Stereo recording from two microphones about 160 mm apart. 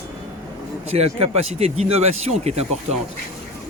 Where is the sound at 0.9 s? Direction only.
40° right (ahead or behind).